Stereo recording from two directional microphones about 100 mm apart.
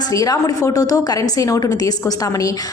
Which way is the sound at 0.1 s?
35° left (ahead or behind).